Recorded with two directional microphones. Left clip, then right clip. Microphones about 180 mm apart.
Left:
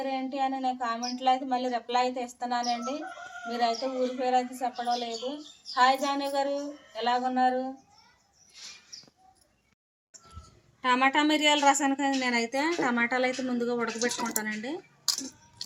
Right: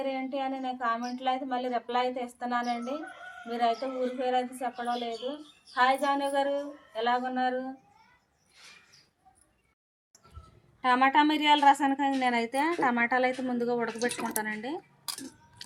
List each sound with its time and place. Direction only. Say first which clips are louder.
0.0 s speech: left 2 dB; centre (ahead or behind)
10.8 s a woman's voice: right 1 dB; 20° right (ahead or behind)